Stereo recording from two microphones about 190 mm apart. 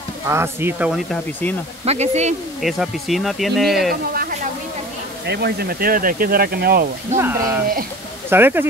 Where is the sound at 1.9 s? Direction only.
35° right (ahead or behind).